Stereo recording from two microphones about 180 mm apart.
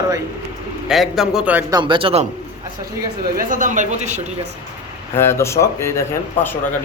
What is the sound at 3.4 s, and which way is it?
Speech, 45° right (ahead or behind).